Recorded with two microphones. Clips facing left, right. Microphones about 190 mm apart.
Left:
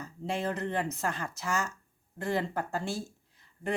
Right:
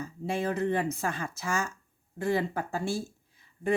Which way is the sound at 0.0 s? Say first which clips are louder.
Right 2 dB; 10° right (ahead or behind).